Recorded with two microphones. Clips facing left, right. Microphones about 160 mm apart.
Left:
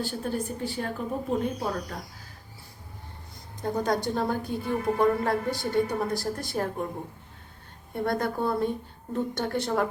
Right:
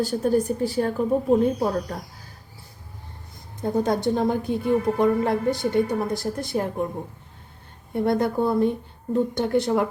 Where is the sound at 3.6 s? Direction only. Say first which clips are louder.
Right 4 dB; 25° right (ahead or behind).